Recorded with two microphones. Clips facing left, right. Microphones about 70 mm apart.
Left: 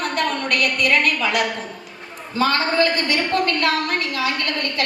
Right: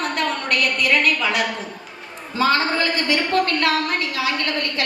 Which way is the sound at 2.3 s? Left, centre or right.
Left.